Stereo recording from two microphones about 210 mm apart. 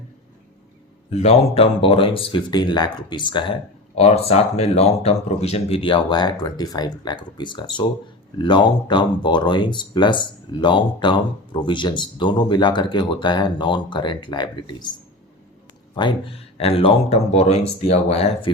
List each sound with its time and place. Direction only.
1.1 s speech: 30° left (ahead or behind)
16.0 s speech: 25° left (ahead or behind)